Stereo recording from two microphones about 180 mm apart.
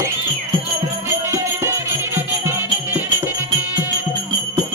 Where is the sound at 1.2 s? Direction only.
15° right (ahead or behind).